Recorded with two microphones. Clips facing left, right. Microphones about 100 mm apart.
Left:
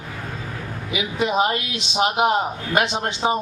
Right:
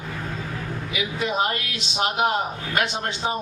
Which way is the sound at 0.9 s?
20° left (ahead or behind).